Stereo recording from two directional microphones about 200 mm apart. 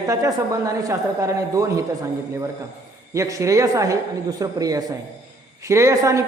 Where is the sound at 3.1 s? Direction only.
15° right (ahead or behind).